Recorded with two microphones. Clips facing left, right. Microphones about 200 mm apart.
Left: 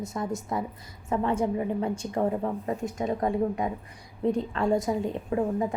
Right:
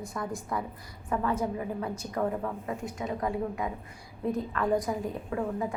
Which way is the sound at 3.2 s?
25° left (ahead or behind).